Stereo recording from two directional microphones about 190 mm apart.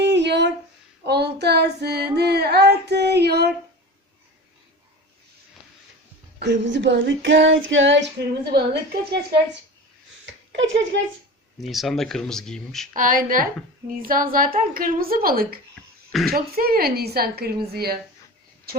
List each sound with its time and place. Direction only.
0.0 s a sound: 65° right (ahead or behind)
1.0 s child singing: 60° right (ahead or behind)
6.4 s female singing: 65° right (ahead or behind)
10.2 s speech: 70° right (ahead or behind)
11.7 s speech: centre (ahead or behind)
12.9 s a woman's voice: 45° right (ahead or behind)